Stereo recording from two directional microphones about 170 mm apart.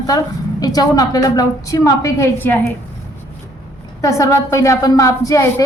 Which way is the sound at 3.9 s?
20° left (ahead or behind).